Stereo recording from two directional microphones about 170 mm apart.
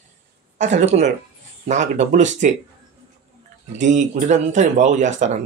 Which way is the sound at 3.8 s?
45° right (ahead or behind).